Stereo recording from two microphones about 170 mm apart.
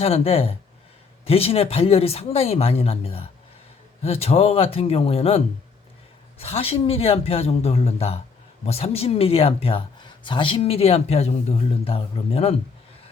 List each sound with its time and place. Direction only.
0.0 s speech: 35° left (ahead or behind)
6.4 s speech: 35° left (ahead or behind)